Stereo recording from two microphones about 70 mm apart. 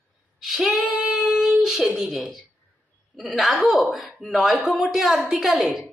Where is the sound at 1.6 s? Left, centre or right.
Centre.